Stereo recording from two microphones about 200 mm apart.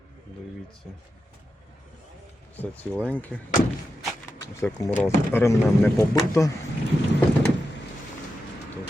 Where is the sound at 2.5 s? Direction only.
10° left (ahead or behind).